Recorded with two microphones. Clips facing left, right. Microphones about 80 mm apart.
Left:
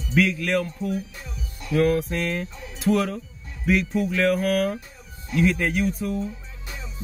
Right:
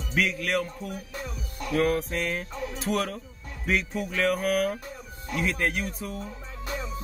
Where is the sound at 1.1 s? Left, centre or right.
Right.